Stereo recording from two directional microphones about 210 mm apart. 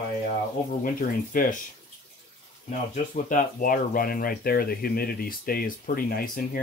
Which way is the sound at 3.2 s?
40° left (ahead or behind).